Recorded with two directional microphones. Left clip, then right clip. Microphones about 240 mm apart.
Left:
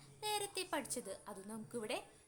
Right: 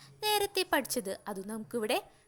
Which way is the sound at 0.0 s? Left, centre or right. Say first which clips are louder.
Right 11 dB; right.